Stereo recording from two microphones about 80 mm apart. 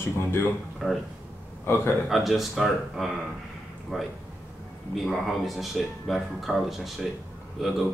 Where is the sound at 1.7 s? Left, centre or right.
Left.